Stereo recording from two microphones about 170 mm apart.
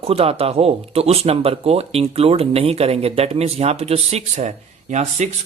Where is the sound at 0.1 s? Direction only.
35° right (ahead or behind).